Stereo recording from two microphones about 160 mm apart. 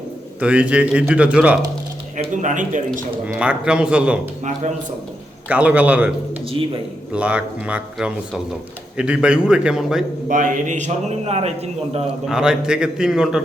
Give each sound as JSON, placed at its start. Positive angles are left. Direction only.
{"t": 0.3, "sound": "a man's voice", "side_deg": -5}
{"t": 2.1, "sound": "a man's voice", "side_deg": -50}
{"t": 3.2, "sound": "a man's voice", "side_deg": -5}
{"t": 5.5, "sound": "a man's voice", "side_deg": -10}
{"t": 10.2, "sound": "a man's voice", "side_deg": -55}
{"t": 12.2, "sound": "a man's voice", "side_deg": -5}